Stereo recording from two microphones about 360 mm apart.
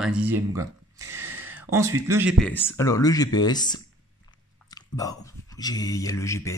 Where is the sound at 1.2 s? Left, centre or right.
Centre.